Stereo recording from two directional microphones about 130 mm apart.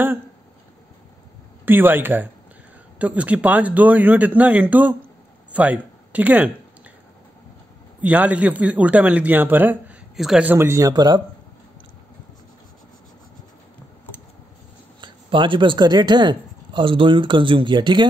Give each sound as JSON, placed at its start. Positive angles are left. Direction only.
{"t": 1.7, "sound": "speech", "side_deg": -15}
{"t": 8.0, "sound": "speech", "side_deg": -10}
{"t": 15.0, "sound": "speech", "side_deg": -40}